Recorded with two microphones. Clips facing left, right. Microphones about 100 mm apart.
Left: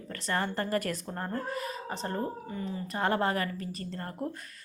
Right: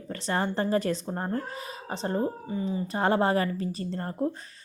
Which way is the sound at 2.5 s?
10° right (ahead or behind).